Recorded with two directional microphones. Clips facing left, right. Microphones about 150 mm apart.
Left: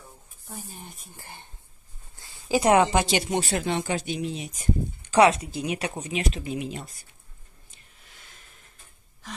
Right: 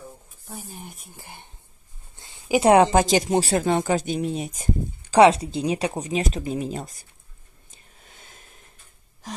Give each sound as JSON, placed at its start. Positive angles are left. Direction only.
{"t": 0.5, "sound": "speech", "side_deg": -15}
{"t": 2.1, "sound": "a sound", "side_deg": -20}
{"t": 2.7, "sound": "speech", "side_deg": -40}
{"t": 5.1, "sound": "speech", "side_deg": -30}